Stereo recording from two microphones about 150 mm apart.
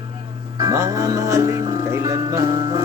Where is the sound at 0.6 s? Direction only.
20° right (ahead or behind).